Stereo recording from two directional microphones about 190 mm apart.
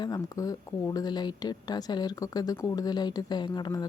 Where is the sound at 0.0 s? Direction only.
20° left (ahead or behind).